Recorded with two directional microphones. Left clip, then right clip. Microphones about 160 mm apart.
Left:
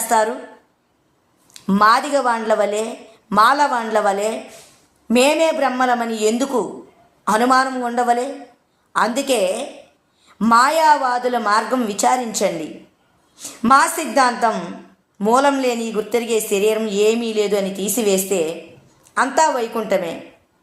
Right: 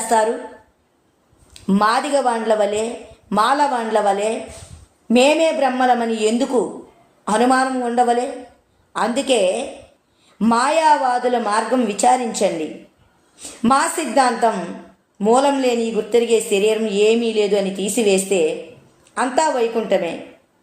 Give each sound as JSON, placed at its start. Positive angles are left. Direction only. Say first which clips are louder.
{"t": 1.6, "sound": "speech", "louder": "left 3 dB", "side_deg": 35}
{"t": 13.4, "sound": "speech", "louder": "left 3 dB", "side_deg": 35}